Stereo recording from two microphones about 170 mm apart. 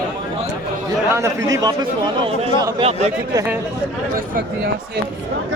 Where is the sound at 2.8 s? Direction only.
35° right (ahead or behind).